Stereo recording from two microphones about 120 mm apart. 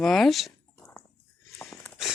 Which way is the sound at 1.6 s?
15° left (ahead or behind).